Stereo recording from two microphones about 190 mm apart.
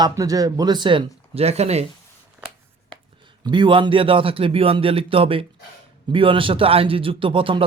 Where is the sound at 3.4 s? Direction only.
25° right (ahead or behind).